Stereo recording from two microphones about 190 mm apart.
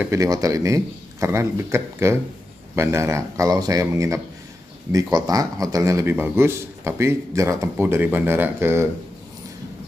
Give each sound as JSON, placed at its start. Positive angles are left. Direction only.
{"t": 0.0, "sound": "a man's voice", "side_deg": -15}